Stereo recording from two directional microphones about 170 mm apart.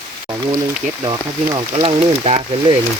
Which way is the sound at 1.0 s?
25° right (ahead or behind).